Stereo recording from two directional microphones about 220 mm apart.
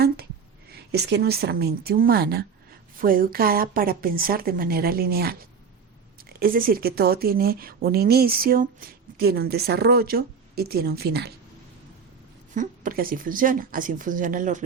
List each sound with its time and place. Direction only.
0.7 s a woman's voice: 45° right (ahead or behind)
12.5 s a woman's voice: 40° right (ahead or behind)